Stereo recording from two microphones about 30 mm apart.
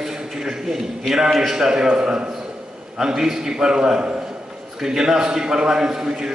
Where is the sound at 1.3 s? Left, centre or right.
Centre.